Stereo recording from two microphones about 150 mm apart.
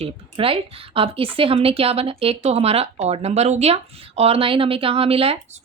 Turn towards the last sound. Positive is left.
turn(degrees=-45)  # may be behind; listen again after turning